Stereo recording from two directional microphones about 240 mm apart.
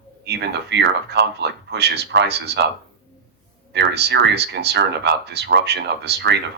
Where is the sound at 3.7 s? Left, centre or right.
Right.